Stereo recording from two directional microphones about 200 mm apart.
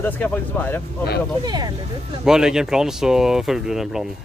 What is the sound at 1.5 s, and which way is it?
Speech, 20° right (ahead or behind).